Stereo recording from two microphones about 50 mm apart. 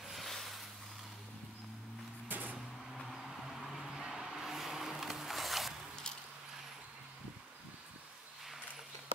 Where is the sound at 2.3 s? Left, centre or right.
Right.